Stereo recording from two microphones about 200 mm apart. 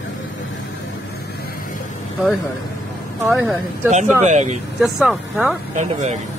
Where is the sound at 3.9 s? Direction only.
35° right (ahead or behind).